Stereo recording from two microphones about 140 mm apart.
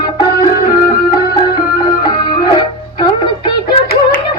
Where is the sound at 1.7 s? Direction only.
90° left.